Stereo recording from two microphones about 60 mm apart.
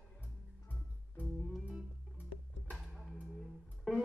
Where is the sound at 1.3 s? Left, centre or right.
Centre.